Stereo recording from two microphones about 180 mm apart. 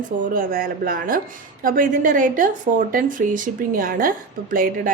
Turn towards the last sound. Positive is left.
turn(degrees=-50)  # may be behind; listen again after turning